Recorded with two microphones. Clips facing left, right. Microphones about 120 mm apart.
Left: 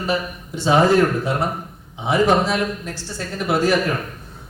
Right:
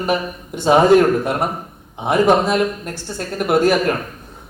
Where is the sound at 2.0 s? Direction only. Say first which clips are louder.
Right 3 dB; 55° right (ahead or behind).